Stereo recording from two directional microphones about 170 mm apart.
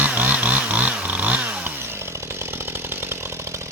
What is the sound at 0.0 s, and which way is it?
Chainsaw, 10° right (ahead or behind).